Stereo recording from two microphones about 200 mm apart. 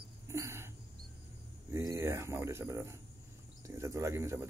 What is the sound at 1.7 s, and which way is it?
Speech, 15° right (ahead or behind).